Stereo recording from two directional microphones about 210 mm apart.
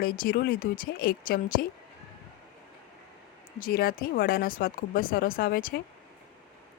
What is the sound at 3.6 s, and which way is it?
A woman's voice, 45° left (ahead or behind).